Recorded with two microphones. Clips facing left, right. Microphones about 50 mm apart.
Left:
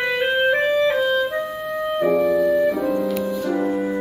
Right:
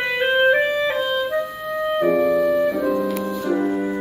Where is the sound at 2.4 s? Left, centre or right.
Centre.